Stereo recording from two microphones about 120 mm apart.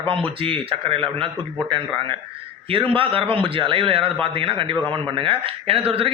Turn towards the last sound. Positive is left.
turn(degrees=-55)  # may be behind; listen again after turning